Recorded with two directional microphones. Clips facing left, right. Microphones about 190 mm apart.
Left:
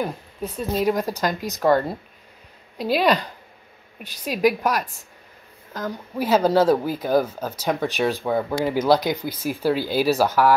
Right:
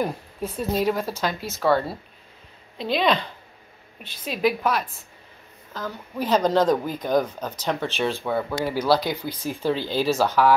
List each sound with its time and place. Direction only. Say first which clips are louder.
0.0 s a woman's voice: right 1 dB; 5° right (ahead or behind)
0.8 s speech: left 2 dB; 15° left (ahead or behind)